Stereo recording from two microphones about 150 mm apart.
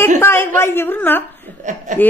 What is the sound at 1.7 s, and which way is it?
Speech, 55° right (ahead or behind).